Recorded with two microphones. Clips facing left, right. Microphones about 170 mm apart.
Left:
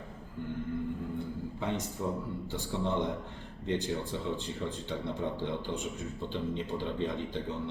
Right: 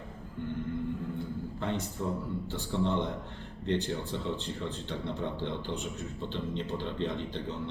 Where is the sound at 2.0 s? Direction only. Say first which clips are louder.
Right 1 dB; 10° left (ahead or behind).